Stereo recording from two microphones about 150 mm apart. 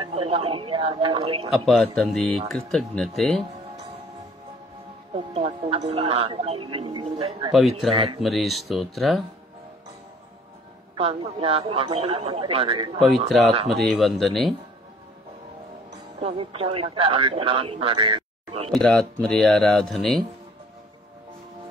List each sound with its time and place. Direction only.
0.0 s a man's voice: 40° right (ahead or behind)
1.5 s speech: centre (ahead or behind)
5.1 s a man's voice: 40° right (ahead or behind)
7.5 s speech: centre (ahead or behind)
7.9 s a man's voice: 35° right (ahead or behind)
8.2 s speech: centre (ahead or behind)
11.0 s a man's voice: 40° right (ahead or behind)
13.3 s speech: centre (ahead or behind)
16.2 s a man's voice: 40° right (ahead or behind)
18.7 s speech: 5° left (ahead or behind)